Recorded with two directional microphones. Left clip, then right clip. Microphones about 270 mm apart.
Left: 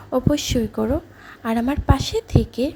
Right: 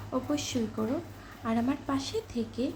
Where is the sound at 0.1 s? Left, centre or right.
Left.